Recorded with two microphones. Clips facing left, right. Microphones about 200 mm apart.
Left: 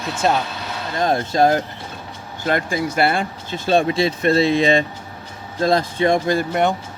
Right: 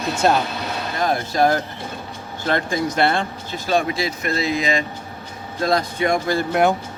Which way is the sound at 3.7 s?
30° left (ahead or behind).